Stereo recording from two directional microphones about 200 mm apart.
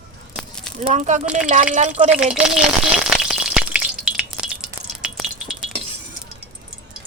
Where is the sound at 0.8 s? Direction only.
35° right (ahead or behind).